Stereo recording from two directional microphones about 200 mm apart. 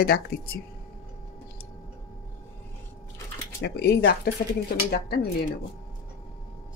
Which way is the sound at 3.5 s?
55° left (ahead or behind).